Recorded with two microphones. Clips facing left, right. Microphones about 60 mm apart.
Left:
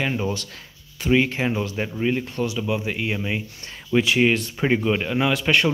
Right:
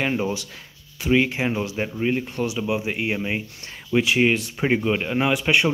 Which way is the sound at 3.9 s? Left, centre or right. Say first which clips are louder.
Even; centre.